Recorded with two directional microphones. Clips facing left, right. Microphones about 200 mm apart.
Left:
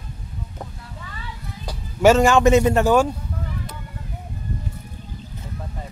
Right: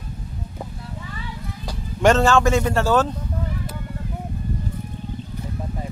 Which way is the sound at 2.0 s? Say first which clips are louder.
Left 2 dB; 10° left (ahead or behind).